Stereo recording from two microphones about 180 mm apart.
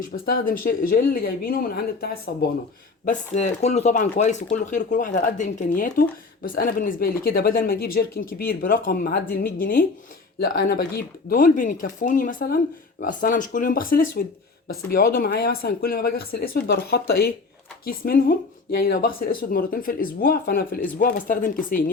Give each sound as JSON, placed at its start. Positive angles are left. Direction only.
{"t": 0.3, "sound": "speech", "side_deg": 50}
{"t": 3.1, "sound": "speech", "side_deg": 40}